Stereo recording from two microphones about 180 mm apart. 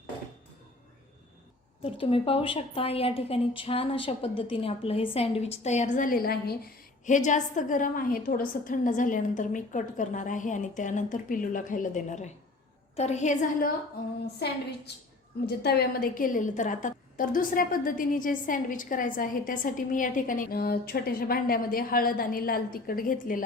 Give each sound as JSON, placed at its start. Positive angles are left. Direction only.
{"t": 1.8, "sound": "a woman's voice", "side_deg": 30}
{"t": 7.3, "sound": "a woman's voice", "side_deg": 45}
{"t": 14.3, "sound": "a woman's voice", "side_deg": 65}